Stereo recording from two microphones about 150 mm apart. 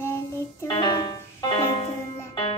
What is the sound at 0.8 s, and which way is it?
Music, 30° left (ahead or behind).